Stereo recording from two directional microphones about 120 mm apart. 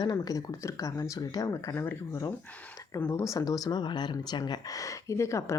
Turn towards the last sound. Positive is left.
turn(degrees=25)  # may be behind; listen again after turning